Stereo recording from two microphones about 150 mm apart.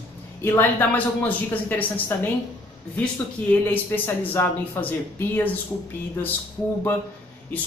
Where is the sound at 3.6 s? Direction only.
15° left (ahead or behind).